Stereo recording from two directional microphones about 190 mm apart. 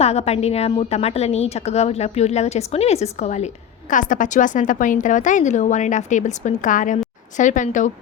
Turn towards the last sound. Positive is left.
turn(degrees=40)  # may be behind; listen again after turning